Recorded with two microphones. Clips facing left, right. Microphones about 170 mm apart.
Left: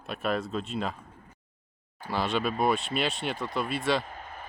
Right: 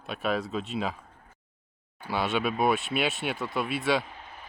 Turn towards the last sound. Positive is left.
turn(degrees=50)  # may be behind; listen again after turning